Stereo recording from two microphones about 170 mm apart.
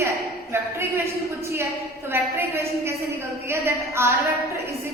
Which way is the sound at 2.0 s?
15° right (ahead or behind).